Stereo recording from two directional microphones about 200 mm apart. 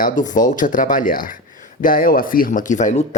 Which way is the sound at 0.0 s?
40° left (ahead or behind).